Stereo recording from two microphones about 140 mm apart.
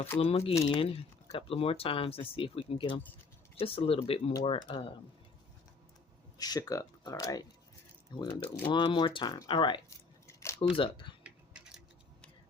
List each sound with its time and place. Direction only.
0.2 s speech: 45° left (ahead or behind)
6.3 s speech: 25° left (ahead or behind)
8.3 s speech: 15° left (ahead or behind)
8.6 s speech: 35° left (ahead or behind)